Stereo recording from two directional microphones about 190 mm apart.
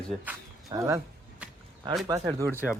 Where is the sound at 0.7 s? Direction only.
15° right (ahead or behind).